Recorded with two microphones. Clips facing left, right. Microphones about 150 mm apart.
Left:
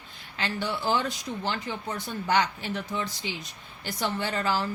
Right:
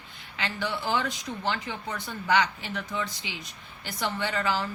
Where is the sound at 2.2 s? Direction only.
35° left (ahead or behind).